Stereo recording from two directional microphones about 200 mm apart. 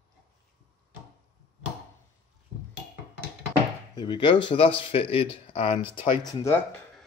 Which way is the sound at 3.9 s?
20° left (ahead or behind).